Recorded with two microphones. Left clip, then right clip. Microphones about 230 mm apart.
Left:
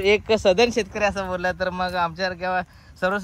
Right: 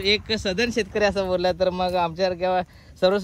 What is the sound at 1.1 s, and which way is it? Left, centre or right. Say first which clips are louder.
A man's voice: right 3 dB; left.